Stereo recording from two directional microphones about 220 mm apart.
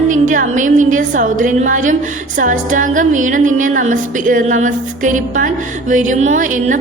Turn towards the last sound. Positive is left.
turn(degrees=-35)  # may be behind; listen again after turning